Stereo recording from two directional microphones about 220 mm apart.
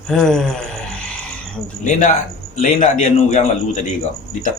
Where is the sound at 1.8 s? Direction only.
35° left (ahead or behind).